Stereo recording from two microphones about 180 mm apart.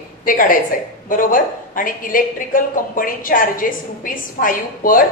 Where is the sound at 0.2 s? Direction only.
50° left (ahead or behind).